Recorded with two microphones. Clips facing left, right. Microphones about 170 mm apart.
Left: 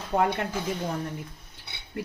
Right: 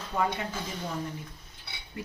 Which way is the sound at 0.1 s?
60° left (ahead or behind).